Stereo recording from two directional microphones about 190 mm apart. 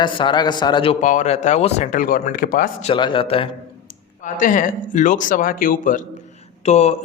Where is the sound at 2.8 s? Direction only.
25° left (ahead or behind).